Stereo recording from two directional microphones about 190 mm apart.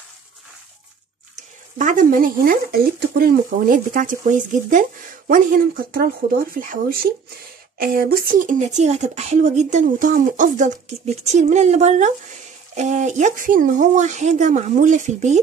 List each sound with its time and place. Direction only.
1.3 s speech: 40° right (ahead or behind)
5.9 s speech: 50° right (ahead or behind)